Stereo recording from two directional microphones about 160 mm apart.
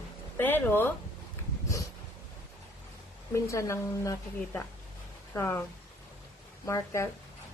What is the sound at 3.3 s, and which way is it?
A woman's voice, 20° left (ahead or behind).